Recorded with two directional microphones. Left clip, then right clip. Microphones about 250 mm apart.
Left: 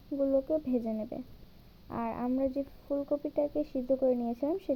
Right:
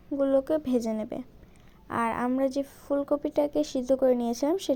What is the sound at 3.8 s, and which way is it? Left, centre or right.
Speech, right.